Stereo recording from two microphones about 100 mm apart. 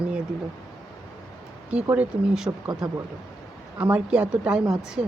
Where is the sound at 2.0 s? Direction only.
5° right (ahead or behind).